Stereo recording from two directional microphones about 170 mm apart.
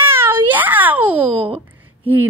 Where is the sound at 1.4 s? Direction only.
35° right (ahead or behind).